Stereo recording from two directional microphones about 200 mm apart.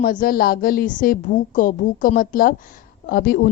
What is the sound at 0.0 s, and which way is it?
A woman's voice, 45° left (ahead or behind).